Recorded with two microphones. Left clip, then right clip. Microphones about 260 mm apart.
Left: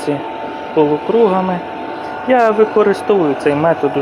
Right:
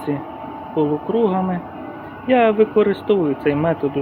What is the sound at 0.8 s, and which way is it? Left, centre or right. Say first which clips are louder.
Speech: left 7 dB; centre.